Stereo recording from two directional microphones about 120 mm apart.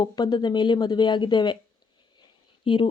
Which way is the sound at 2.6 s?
45° left (ahead or behind).